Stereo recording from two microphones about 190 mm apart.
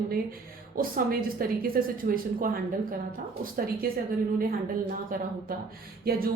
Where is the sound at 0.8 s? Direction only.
50° right (ahead or behind).